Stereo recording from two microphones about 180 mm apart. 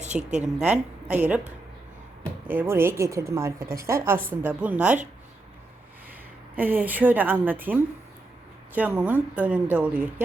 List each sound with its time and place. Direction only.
0.1 s a woman's voice: 5° right (ahead or behind)
2.5 s a woman's voice: 10° right (ahead or behind)
6.6 s a woman's voice: 10° right (ahead or behind)